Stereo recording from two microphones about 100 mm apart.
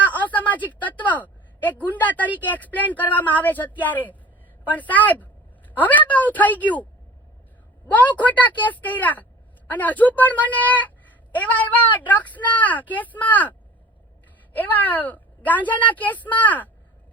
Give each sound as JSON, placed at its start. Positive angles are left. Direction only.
{"t": 0.0, "sound": "a sound", "side_deg": 15}
{"t": 0.8, "sound": "a woman's voice", "side_deg": 15}
{"t": 7.9, "sound": "speech", "side_deg": 15}
{"t": 14.5, "sound": "speech", "side_deg": 15}